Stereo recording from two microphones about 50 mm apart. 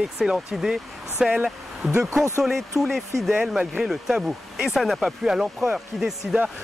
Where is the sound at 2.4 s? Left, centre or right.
Centre.